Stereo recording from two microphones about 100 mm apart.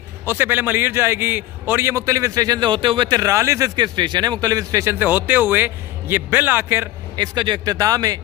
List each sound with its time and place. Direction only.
0.2 s a man's voice: 20° right (ahead or behind); by 2.7 s 40° right (ahead or behind)
2.7 s a man's voice: 60° right (ahead or behind)
3.1 s a man's voice: 35° right (ahead or behind)
4.9 s a man's voice: 20° right (ahead or behind)
7.2 s a man's voice: 50° right (ahead or behind)